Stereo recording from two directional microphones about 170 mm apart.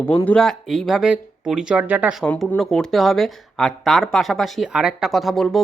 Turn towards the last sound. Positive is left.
turn(degrees=0)  # may be behind; listen again after turning